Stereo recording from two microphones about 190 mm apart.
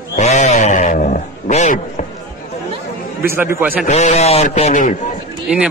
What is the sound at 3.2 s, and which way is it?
Speech, 10° right (ahead or behind).